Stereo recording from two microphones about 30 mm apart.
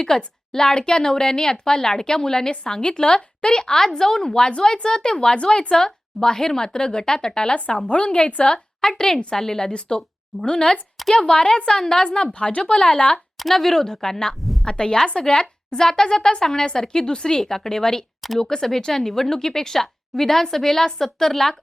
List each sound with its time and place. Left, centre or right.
0.1 s a woman's voice: centre; by 8.6 s left
8.8 s a woman's voice: centre; by 12.7 s left
12.7 s speech: left
13.5 s a woman's voice: centre